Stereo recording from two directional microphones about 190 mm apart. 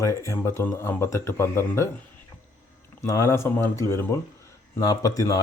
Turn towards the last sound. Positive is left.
turn(degrees=20)  # may be behind; listen again after turning